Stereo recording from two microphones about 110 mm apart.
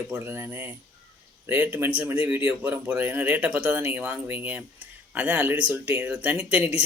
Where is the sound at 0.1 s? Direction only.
20° right (ahead or behind).